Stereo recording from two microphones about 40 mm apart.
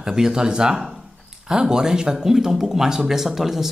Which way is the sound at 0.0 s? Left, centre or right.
Centre.